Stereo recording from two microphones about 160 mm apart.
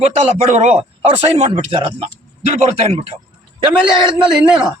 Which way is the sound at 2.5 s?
40° right (ahead or behind).